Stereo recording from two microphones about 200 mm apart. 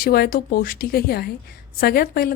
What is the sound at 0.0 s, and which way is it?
A woman's voice, 50° left (ahead or behind).